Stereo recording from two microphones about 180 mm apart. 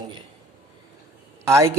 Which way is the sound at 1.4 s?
15° right (ahead or behind).